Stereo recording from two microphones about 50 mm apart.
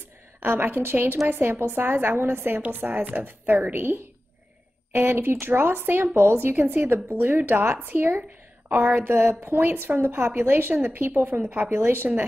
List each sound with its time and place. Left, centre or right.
0.4 s a woman's voice: right